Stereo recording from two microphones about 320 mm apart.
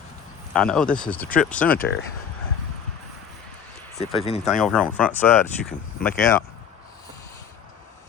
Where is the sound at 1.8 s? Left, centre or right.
Left.